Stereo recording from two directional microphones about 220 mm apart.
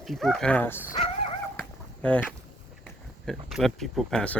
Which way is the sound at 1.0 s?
25° left (ahead or behind).